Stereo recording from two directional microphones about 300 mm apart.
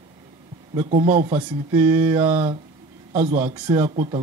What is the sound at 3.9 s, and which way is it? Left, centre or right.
Speech, right.